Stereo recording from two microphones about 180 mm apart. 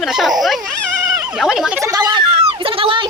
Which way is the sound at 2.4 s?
30° right (ahead or behind).